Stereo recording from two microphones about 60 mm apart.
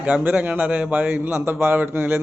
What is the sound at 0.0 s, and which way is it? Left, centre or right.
A man's voice, right.